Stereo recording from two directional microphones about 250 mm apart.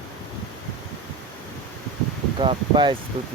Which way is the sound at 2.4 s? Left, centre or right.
Centre.